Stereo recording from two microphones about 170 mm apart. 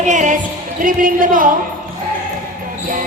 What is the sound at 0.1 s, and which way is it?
Basketball bounce, 50° right (ahead or behind).